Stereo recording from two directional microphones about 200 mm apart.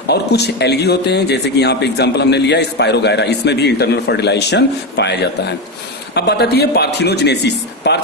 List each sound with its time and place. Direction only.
0.0 s a man's voice: 55° left (ahead or behind)